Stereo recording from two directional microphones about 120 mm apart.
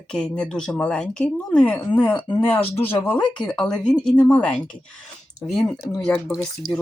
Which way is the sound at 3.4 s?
5° left (ahead or behind).